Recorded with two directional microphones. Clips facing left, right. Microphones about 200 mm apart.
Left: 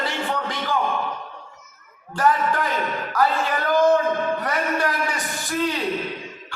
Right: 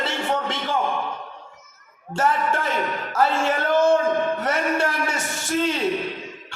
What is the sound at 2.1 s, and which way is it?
A man's voice, 25° right (ahead or behind).